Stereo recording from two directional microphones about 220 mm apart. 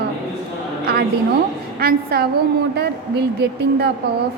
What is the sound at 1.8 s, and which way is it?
A woman's voice, 45° right (ahead or behind).